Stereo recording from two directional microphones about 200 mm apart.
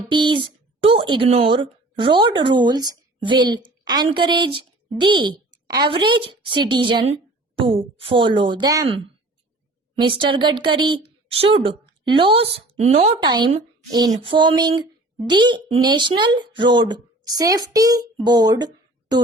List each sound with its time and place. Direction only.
0.1 s speech: 25° right (ahead or behind)
10.0 s speech: 25° right (ahead or behind)